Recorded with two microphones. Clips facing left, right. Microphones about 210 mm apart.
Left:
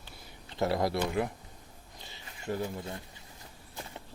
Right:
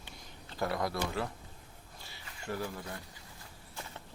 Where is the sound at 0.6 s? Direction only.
25° left (ahead or behind).